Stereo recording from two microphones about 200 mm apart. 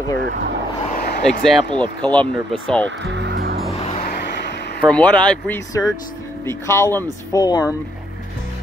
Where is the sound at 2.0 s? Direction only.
5° left (ahead or behind).